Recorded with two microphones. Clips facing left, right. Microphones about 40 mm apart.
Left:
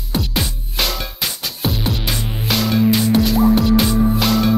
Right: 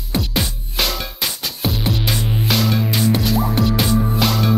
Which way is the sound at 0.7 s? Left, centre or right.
Centre.